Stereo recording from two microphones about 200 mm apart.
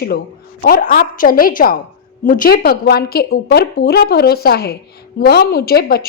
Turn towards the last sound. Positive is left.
turn(degrees=50)  # may be behind; listen again after turning